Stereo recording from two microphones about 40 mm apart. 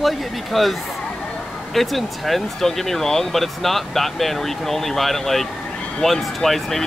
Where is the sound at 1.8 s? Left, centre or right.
Centre.